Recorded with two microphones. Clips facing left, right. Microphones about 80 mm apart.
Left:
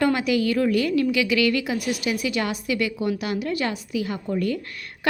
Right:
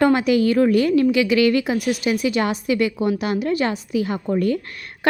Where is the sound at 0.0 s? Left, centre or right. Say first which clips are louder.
Right 5 dB; right.